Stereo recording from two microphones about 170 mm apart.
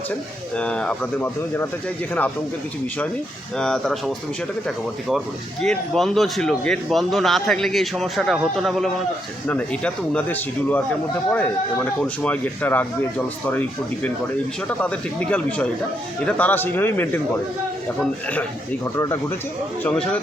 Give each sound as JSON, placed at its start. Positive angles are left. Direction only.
{"t": 0.5, "sound": "speech", "side_deg": 5}
{"t": 3.6, "sound": "speech", "side_deg": 5}
{"t": 5.6, "sound": "speech", "side_deg": 0}